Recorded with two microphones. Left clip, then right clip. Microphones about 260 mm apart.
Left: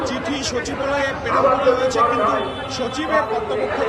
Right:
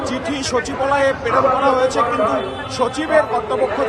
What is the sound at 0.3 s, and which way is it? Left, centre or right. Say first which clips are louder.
A man's voice: right 3 dB; centre.